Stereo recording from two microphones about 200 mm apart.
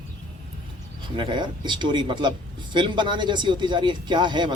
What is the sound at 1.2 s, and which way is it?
Speech, 25° right (ahead or behind).